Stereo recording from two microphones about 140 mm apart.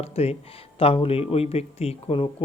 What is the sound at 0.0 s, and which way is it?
Speech, 45° left (ahead or behind).